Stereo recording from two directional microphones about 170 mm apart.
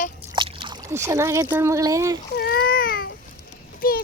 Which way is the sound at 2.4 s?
70° left (ahead or behind).